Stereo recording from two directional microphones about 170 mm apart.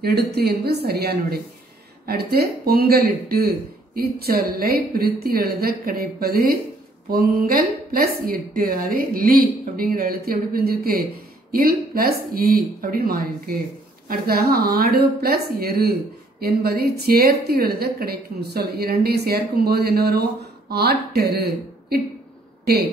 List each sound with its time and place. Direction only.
0.0 s a woman's voice: 70° right (ahead or behind)